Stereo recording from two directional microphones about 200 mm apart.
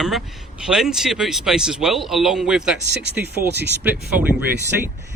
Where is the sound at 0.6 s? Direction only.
5° right (ahead or behind).